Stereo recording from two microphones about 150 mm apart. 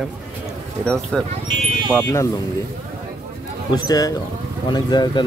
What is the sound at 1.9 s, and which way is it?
Speech, 15° left (ahead or behind).